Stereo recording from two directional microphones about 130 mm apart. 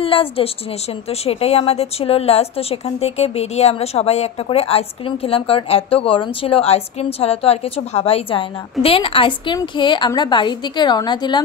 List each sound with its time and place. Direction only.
0.0 s a woman's voice: 45° left (ahead or behind)